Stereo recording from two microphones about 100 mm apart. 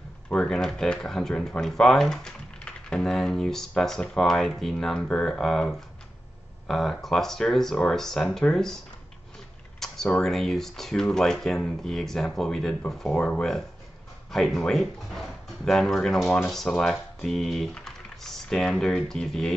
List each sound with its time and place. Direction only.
0.3 s speech: 5° left (ahead or behind)
9.8 s speech: 5° left (ahead or behind)